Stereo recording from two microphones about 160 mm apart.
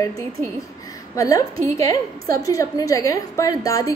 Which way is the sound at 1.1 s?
20° left (ahead or behind).